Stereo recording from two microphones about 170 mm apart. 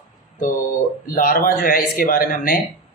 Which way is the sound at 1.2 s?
55° left (ahead or behind).